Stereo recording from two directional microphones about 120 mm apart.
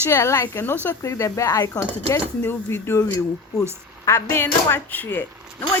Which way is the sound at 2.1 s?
20° left (ahead or behind).